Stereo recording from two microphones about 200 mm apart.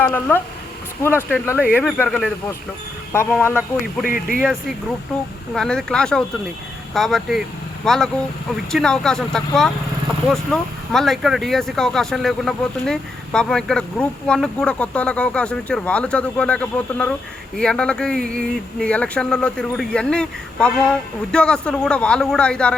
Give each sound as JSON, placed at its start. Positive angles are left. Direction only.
{"t": 0.0, "sound": "speech", "side_deg": 10}
{"t": 4.0, "sound": "speech", "side_deg": 45}
{"t": 5.5, "sound": "speech", "side_deg": 5}